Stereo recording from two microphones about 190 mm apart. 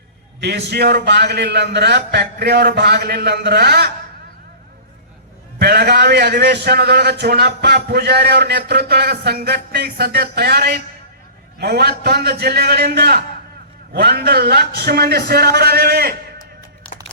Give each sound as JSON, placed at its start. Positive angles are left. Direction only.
{"t": 0.4, "sound": "a man's voice", "side_deg": -60}
{"t": 5.5, "sound": "a man's voice", "side_deg": -60}